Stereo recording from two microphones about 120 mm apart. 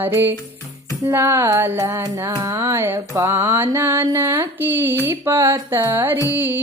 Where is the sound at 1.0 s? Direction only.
20° right (ahead or behind).